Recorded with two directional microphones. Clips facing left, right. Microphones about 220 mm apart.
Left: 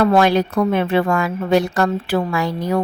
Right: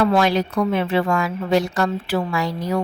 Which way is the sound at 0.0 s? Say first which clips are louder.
Left 3 dB; 55° left (ahead or behind).